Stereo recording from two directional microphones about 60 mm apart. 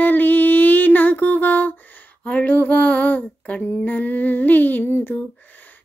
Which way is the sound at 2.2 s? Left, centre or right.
Left.